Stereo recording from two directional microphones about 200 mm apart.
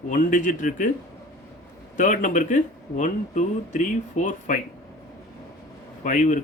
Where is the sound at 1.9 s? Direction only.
40° left (ahead or behind).